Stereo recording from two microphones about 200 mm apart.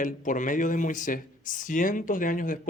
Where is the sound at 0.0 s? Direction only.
40° left (ahead or behind).